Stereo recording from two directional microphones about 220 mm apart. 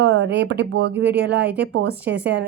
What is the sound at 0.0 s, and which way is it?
Speech, 50° right (ahead or behind).